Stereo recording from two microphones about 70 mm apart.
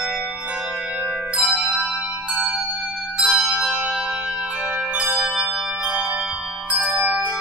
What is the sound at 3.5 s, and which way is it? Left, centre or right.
Music, centre.